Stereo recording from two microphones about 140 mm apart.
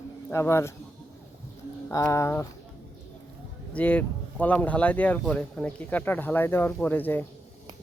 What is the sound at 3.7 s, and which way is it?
Speech, 10° left (ahead or behind).